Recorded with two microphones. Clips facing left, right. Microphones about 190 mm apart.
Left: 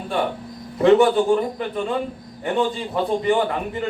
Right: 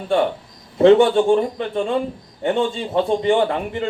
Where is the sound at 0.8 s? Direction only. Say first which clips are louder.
Right 3 dB; 25° right (ahead or behind).